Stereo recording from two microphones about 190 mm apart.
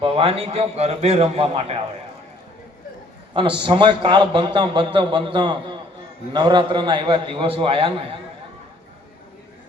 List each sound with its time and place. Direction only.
0.0 s a man's voice: 30° right (ahead or behind)
3.3 s a man's voice: 25° right (ahead or behind)